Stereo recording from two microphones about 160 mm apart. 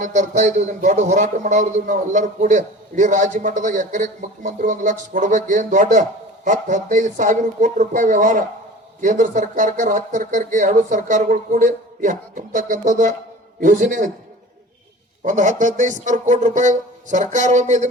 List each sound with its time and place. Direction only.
0.0 s a man's voice: 50° right (ahead or behind)
15.2 s a man's voice: 55° right (ahead or behind)